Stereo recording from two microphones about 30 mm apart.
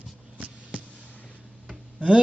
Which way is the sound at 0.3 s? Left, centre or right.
Right.